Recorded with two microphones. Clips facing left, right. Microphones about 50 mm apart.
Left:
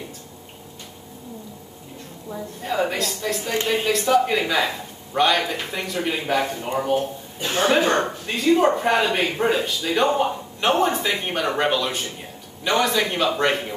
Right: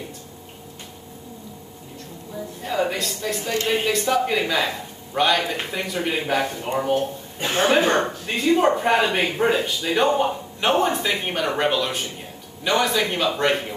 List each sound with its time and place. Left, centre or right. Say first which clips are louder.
2.6 s speech: left 1 dB; centre
7.3 s a man's voice: right 1 dB; right
7.6 s speech: even; centre